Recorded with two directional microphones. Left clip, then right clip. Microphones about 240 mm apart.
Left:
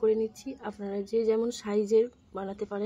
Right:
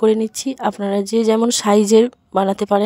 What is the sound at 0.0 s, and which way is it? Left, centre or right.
Speech, right.